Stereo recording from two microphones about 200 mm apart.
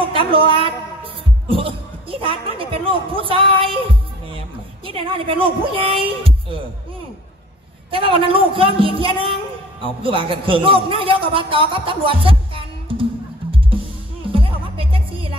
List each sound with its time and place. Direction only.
0.3 s a man's voice: 25° right (ahead or behind)
4.8 s a man's voice: 25° right (ahead or behind)
7.9 s a man's voice: 25° right (ahead or behind)
13.5 s music: 25° right (ahead or behind)